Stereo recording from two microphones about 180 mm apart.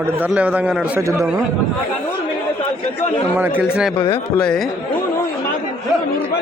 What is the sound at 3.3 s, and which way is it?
Speech, 10° right (ahead or behind).